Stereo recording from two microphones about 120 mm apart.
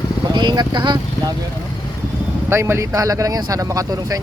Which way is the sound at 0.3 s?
40° right (ahead or behind).